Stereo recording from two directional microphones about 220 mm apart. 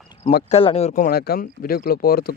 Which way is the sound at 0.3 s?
40° left (ahead or behind).